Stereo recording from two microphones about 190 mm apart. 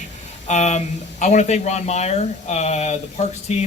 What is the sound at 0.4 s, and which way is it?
Speech, 35° left (ahead or behind).